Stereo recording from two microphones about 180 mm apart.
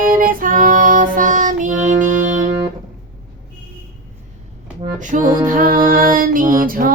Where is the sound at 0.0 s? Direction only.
50° right (ahead or behind).